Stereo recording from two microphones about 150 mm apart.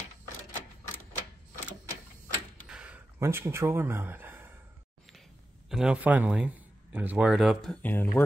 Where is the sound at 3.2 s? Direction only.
15° right (ahead or behind).